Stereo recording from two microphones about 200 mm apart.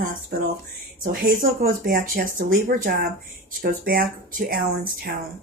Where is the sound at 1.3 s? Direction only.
45° right (ahead or behind).